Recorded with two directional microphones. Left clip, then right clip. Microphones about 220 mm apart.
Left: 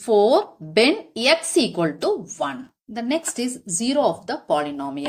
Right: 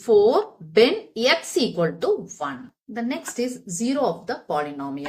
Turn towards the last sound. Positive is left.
turn(degrees=35)  # may be behind; listen again after turning